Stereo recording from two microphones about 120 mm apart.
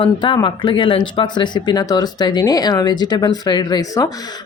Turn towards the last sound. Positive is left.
turn(degrees=30)  # may be behind; listen again after turning